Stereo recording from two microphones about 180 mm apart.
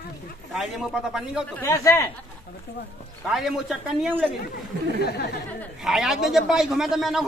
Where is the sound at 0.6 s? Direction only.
Centre (ahead or behind).